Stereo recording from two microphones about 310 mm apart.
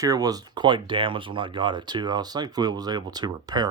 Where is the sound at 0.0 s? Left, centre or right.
Centre.